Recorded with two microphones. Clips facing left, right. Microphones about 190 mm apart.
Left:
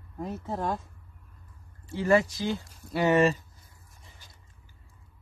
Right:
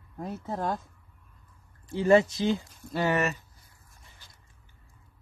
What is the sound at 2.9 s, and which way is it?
Speech, 25° left (ahead or behind).